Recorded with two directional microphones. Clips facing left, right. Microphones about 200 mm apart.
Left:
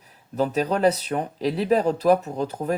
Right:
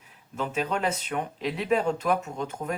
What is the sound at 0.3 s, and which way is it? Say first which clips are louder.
Speech: left 6 dB; 35° left (ahead or behind).